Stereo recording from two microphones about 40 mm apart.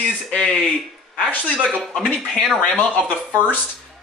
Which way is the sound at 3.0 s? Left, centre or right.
Left.